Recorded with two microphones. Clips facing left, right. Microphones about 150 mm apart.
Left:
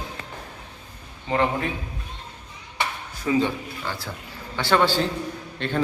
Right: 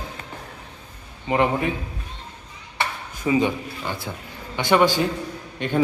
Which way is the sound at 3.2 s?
15° right (ahead or behind).